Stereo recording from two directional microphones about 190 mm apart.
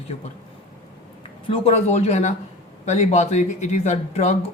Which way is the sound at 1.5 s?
35° left (ahead or behind).